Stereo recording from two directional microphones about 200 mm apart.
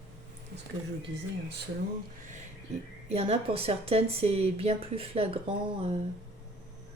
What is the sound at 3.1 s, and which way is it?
Speech, 30° right (ahead or behind).